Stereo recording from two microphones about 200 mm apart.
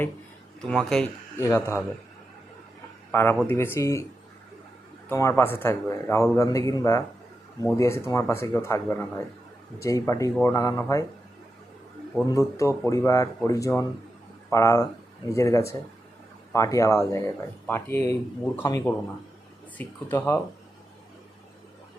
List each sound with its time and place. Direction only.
0.6 s a man's voice: 5° left (ahead or behind)
1.5 s speech: 15° left (ahead or behind)
3.1 s speech: 10° left (ahead or behind)
5.0 s speech: 15° left (ahead or behind)
12.3 s speech: 15° left (ahead or behind)